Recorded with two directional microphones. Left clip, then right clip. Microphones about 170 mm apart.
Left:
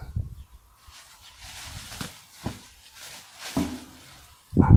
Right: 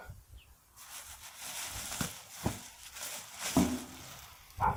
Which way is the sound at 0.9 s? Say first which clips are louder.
Left 1 dB; 55° right (ahead or behind).